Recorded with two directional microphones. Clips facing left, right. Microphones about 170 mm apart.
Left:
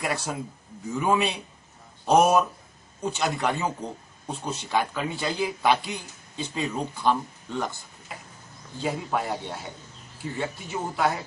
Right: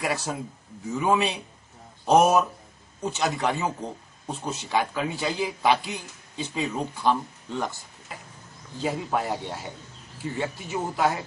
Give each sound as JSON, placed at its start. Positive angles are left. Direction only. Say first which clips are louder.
{"t": 0.0, "sound": "a man's voice", "louder": "right 1 dB", "side_deg": 0}
{"t": 8.8, "sound": "a man's voice", "louder": "right 1 dB", "side_deg": 0}